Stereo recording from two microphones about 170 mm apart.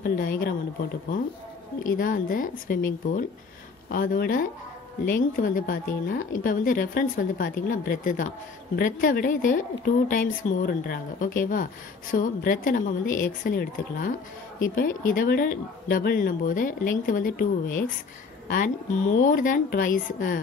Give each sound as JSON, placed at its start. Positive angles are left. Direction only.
{"t": 0.0, "sound": "speech", "side_deg": 55}
{"t": 1.9, "sound": "a woman's voice", "side_deg": 55}
{"t": 19.1, "sound": "a woman's voice", "side_deg": 50}